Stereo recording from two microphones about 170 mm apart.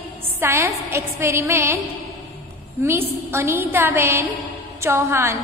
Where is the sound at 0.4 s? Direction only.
15° right (ahead or behind).